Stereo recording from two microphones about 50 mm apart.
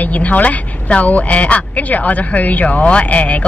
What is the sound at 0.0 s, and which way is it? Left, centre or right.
A woman's voice, left.